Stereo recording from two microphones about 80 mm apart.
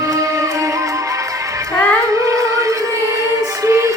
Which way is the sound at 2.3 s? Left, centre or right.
Right.